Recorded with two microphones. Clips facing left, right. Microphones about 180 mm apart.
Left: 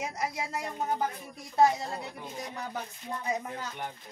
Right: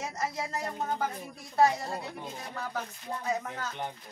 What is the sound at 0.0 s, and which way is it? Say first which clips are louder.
Speech: even; 15° left (ahead or behind).